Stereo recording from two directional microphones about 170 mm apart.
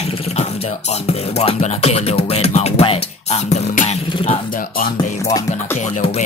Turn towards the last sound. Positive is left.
turn(degrees=40)  # may be behind; listen again after turning